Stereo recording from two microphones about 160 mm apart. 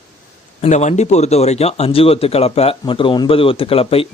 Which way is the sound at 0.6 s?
45° left (ahead or behind).